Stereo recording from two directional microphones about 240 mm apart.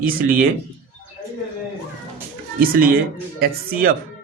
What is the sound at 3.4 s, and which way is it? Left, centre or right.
Speech, right.